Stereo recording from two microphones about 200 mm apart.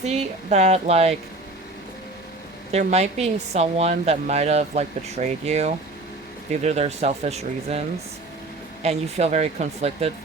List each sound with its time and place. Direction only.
0.0 s speech: 35° right (ahead or behind)
2.7 s speech: 35° right (ahead or behind)
8.8 s speech: 35° right (ahead or behind)